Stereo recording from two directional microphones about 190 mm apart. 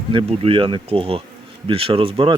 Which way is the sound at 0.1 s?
30° right (ahead or behind).